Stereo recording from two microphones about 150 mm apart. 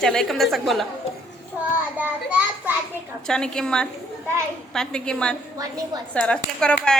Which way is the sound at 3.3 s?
5° left (ahead or behind).